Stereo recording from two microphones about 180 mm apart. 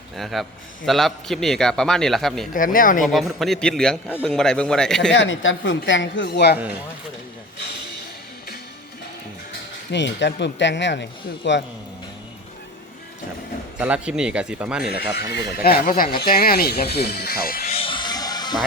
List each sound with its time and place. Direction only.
0.2 s a man's voice: centre (ahead or behind)
2.5 s speech: 50° left (ahead or behind)
3.0 s a man's voice: centre (ahead or behind)
5.1 s speech: 85° left; by 6.6 s 65° left (ahead or behind)
9.9 s speech: 75° left (ahead or behind)
13.7 s a man's voice: 5° right (ahead or behind)
15.6 s speech: 55° left (ahead or behind)
17.7 s music: 30° left (ahead or behind)